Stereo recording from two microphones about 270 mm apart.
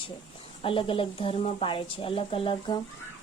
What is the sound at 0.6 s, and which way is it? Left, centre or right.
Speech, centre.